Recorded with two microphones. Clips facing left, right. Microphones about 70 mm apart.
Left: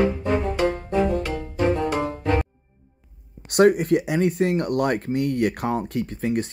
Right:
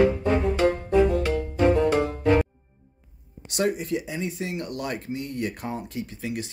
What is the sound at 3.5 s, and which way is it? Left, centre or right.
Speech, left.